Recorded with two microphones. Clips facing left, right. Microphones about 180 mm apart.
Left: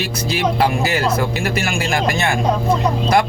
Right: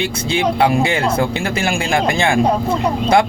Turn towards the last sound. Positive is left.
turn(degrees=-25)  # may be behind; listen again after turning